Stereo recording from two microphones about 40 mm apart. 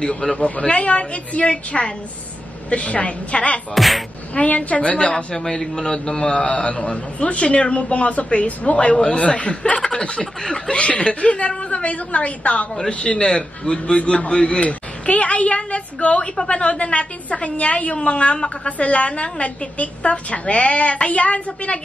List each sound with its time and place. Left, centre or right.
0.4 s a woman's voice: left
3.7 s a sound: centre
4.4 s a woman's voice: left
5.1 s a man's voice: centre; by 21.7 s left